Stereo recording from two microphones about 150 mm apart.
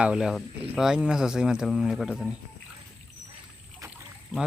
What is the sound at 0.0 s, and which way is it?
Speech, 5° right (ahead or behind).